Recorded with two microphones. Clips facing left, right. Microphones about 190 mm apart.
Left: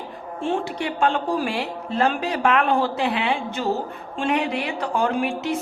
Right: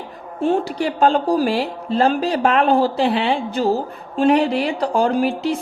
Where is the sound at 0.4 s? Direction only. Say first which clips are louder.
Right 6 dB; 40° right (ahead or behind).